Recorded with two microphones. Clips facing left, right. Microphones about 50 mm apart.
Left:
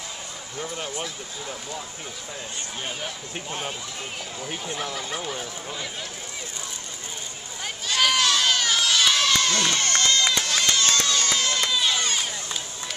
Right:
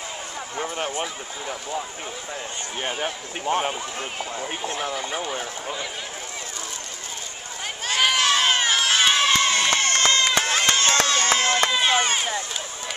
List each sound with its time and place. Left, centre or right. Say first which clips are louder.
0.6 s speech: right 4 dB; right
2.8 s speech: right 7 dB; right
4.4 s speech: right 3 dB; right
4.9 s speech: right 3 dB; centre
7.9 s crowd: right 1 dB; right